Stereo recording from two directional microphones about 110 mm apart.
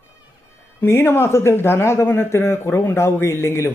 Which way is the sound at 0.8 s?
20° left (ahead or behind).